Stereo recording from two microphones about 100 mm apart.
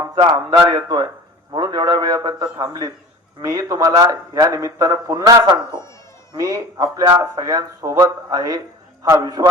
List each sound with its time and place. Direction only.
0.2 s a man's voice: 50° right (ahead or behind)